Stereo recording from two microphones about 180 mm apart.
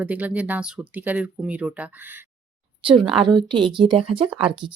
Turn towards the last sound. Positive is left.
turn(degrees=-30)  # may be behind; listen again after turning